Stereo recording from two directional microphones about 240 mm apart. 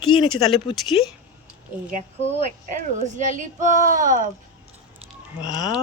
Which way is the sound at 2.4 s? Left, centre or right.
Right.